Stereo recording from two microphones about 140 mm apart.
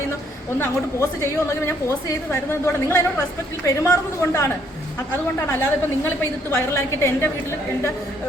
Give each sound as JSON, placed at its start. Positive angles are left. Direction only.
{"t": 0.6, "sound": "a woman's voice", "side_deg": 20}